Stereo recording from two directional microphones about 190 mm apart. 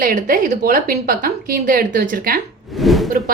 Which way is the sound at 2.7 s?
Centre (ahead or behind).